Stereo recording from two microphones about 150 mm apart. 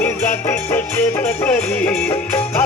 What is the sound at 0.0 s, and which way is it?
Music, 15° left (ahead or behind).